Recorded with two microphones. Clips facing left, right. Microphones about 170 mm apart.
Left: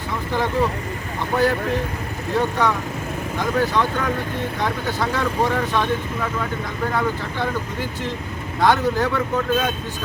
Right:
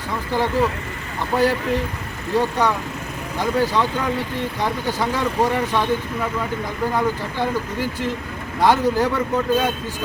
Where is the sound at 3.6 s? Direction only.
10° right (ahead or behind).